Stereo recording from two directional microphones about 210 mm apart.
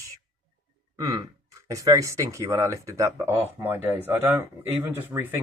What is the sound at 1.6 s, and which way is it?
Speech, 15° right (ahead or behind).